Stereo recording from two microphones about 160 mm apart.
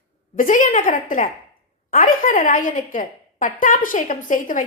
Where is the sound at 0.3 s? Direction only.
55° left (ahead or behind).